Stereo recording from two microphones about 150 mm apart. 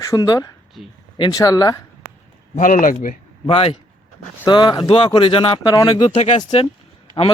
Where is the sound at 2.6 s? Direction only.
60° left (ahead or behind).